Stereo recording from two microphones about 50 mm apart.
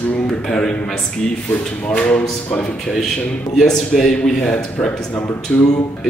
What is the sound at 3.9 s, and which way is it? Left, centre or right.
Speech, centre.